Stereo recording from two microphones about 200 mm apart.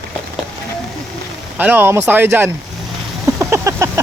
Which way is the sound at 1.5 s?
10° right (ahead or behind).